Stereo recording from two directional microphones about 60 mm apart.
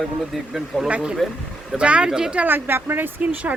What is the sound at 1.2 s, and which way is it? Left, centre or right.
Speech, centre.